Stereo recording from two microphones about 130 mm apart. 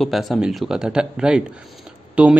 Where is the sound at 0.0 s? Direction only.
Centre (ahead or behind).